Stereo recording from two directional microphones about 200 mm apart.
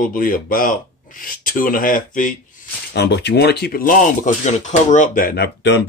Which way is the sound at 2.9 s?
55° left (ahead or behind).